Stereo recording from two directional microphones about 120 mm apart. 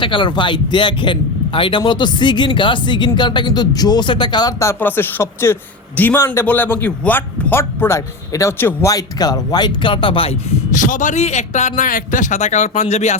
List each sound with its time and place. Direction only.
0.0 s a man's voice: 45° left (ahead or behind)
4.6 s a man's voice: 20° left (ahead or behind)
8.9 s a man's voice: 30° left (ahead or behind); by 10.3 s 50° left (ahead or behind)
10.8 s a man's voice: 90° left; by 13.1 s 70° left (ahead or behind)